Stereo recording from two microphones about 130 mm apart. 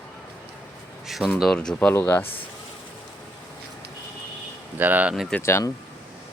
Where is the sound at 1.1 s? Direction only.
Centre (ahead or behind).